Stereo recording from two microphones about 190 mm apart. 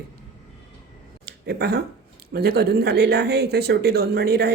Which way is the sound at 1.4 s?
60° right (ahead or behind).